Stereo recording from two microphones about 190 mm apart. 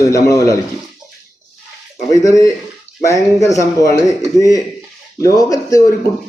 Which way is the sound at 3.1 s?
15° left (ahead or behind).